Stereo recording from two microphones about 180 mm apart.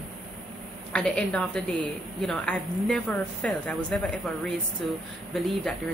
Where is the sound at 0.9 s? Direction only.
5° left (ahead or behind).